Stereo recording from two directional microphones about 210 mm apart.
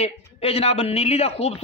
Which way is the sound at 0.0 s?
30° left (ahead or behind).